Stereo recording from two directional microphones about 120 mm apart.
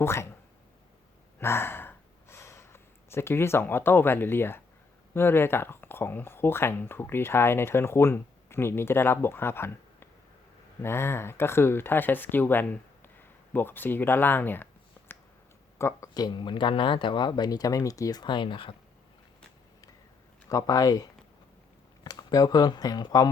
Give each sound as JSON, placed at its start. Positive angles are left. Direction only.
{"t": 0.0, "sound": "speech", "side_deg": 20}
{"t": 1.4, "sound": "gasp", "side_deg": 20}
{"t": 5.1, "sound": "speech", "side_deg": 20}
{"t": 20.5, "sound": "speech", "side_deg": 30}